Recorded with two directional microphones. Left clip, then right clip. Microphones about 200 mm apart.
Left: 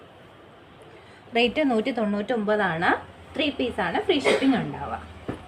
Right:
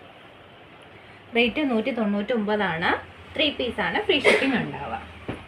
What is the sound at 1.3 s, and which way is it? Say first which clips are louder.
A woman's voice: left 1 dB; 30° left (ahead or behind).